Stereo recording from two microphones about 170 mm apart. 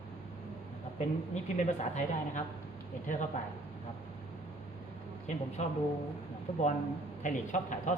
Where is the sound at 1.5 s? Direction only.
45° left (ahead or behind).